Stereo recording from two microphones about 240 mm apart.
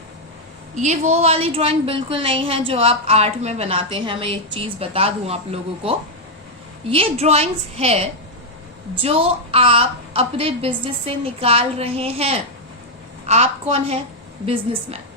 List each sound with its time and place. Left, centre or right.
0.8 s a woman's voice: right